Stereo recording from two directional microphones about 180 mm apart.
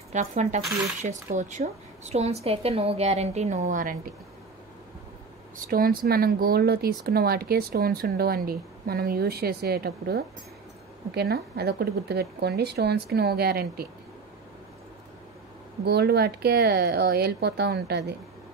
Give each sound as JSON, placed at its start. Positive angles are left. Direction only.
{"t": 0.1, "sound": "speech", "side_deg": -40}
{"t": 5.6, "sound": "speech", "side_deg": -55}
{"t": 15.8, "sound": "speech", "side_deg": -65}